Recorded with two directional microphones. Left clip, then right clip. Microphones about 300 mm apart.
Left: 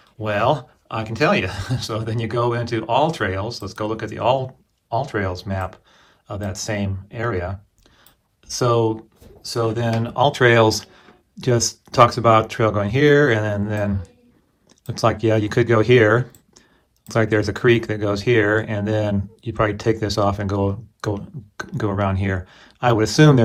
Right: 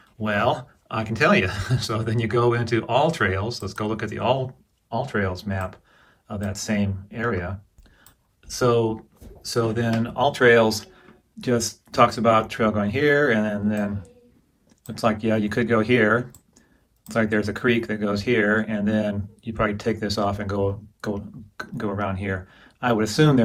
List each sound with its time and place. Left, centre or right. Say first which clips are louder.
0.2 s speech: left 3 dB; centre